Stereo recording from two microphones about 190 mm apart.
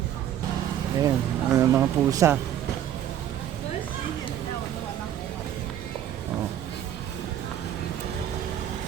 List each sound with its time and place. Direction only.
0.9 s speech: 20° right (ahead or behind)